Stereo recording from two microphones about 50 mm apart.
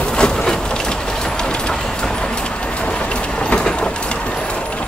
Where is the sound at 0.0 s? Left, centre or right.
Centre.